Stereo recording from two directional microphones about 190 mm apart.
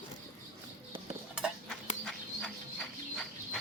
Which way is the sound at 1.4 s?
5° right (ahead or behind).